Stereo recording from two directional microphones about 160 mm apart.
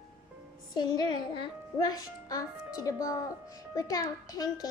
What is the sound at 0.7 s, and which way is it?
A child's voice, 30° left (ahead or behind).